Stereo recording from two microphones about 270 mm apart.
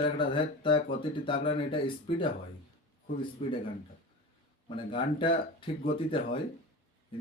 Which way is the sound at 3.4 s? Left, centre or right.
Left.